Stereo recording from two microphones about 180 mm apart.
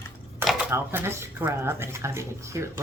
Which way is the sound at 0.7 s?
15° right (ahead or behind).